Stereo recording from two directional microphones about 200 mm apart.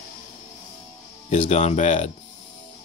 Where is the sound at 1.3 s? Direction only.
35° left (ahead or behind).